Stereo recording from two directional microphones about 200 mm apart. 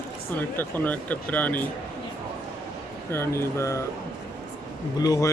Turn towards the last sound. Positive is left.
turn(degrees=20)  # may be behind; listen again after turning